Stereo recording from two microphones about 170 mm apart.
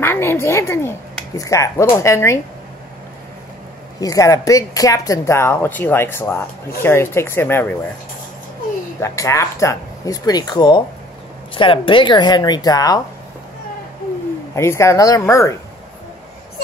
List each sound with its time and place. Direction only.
0.0 s speech: 15° left (ahead or behind)
4.0 s speech: 20° left (ahead or behind)
9.0 s speech: 15° left (ahead or behind)
14.5 s speech: 15° left (ahead or behind)